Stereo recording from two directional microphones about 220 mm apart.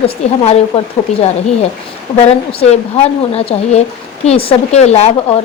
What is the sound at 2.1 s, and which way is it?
Speech, 30° left (ahead or behind).